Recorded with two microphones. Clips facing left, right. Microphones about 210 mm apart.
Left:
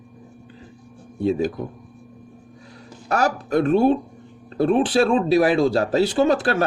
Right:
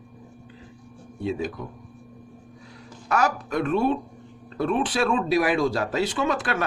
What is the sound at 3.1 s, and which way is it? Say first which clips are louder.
Speech: left 4 dB; 35° left (ahead or behind).